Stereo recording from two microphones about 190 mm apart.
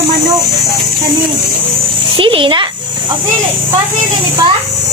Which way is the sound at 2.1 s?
25° right (ahead or behind).